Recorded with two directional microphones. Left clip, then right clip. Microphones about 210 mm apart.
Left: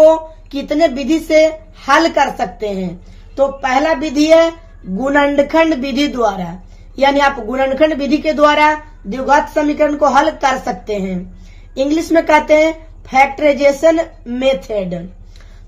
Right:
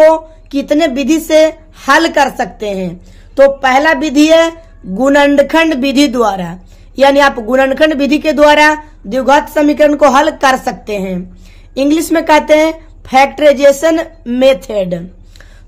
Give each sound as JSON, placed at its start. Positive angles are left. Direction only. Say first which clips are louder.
{"t": 0.0, "sound": "speech", "louder": "right 2 dB", "side_deg": -25}